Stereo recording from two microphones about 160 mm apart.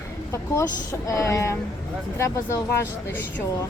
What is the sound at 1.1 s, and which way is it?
Speech, 20° left (ahead or behind).